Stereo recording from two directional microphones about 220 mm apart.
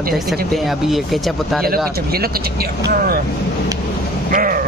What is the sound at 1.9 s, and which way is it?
Speech, 45° right (ahead or behind).